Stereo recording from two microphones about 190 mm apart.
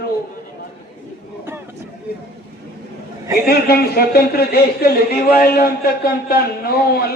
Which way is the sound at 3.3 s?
55° left (ahead or behind).